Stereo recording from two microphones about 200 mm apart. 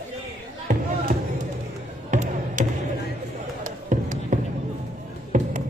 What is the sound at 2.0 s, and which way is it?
Music, 40° right (ahead or behind).